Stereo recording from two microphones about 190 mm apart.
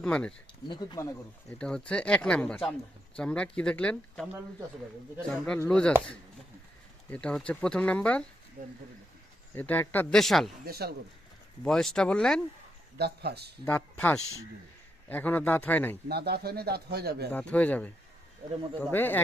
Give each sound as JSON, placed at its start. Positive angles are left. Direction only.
{"t": 0.0, "sound": "speech", "side_deg": 5}
{"t": 0.7, "sound": "speech", "side_deg": 20}
{"t": 1.5, "sound": "speech", "side_deg": 5}
{"t": 5.3, "sound": "speech", "side_deg": 5}
{"t": 7.1, "sound": "speech", "side_deg": 5}
{"t": 9.6, "sound": "speech", "side_deg": 10}
{"t": 10.7, "sound": "speech", "side_deg": -55}
{"t": 11.6, "sound": "speech", "side_deg": 0}
{"t": 13.0, "sound": "speech", "side_deg": -60}
{"t": 13.7, "sound": "speech", "side_deg": 10}
{"t": 16.0, "sound": "speech", "side_deg": -55}
{"t": 17.3, "sound": "speech", "side_deg": 5}